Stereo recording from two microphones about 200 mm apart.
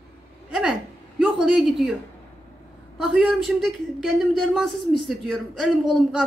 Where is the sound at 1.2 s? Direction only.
Centre (ahead or behind).